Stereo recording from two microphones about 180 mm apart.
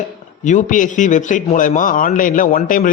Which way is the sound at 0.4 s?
45° left (ahead or behind).